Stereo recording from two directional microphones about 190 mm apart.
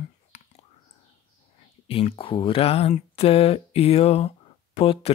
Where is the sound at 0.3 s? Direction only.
35° left (ahead or behind).